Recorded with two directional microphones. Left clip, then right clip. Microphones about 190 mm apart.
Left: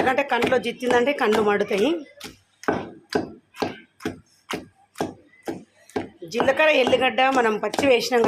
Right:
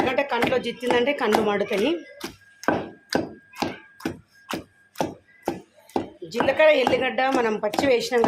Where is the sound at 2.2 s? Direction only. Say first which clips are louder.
Right 3 dB; centre (ahead or behind).